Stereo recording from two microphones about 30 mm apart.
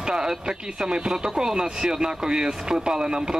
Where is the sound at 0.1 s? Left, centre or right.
Right.